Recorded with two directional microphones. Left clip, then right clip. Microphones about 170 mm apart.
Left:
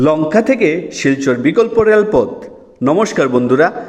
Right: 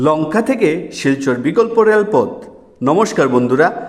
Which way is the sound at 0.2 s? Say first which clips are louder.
Left 3 dB; 10° left (ahead or behind).